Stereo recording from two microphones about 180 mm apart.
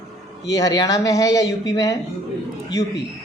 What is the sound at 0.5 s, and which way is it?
Speech, 20° left (ahead or behind).